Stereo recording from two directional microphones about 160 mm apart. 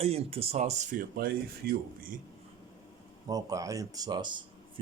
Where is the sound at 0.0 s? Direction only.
40° right (ahead or behind); by 2.1 s 70° right (ahead or behind).